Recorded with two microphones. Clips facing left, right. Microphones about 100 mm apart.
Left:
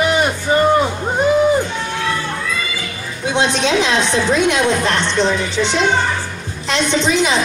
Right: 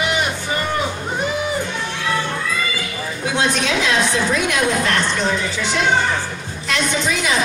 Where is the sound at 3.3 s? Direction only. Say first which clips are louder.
Left 4 dB; 25° left (ahead or behind).